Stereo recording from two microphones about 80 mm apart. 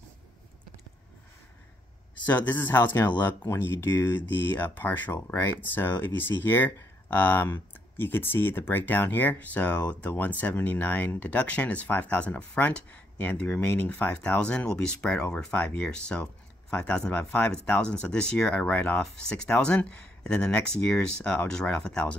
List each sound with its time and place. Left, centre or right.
2.2 s speech: left
2.8 s speech: left; by 22.1 s centre